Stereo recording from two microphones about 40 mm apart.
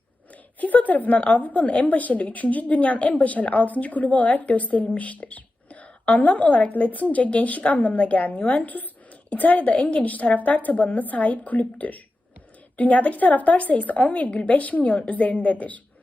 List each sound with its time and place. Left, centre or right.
0.6 s a woman's voice: left